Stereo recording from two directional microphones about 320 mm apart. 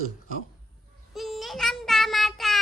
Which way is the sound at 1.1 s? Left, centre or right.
Centre.